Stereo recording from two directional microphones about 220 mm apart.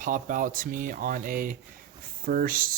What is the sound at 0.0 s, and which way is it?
A man's voice, 35° right (ahead or behind).